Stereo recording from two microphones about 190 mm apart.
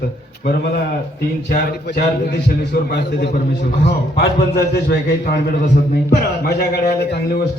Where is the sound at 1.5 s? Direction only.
55° left (ahead or behind).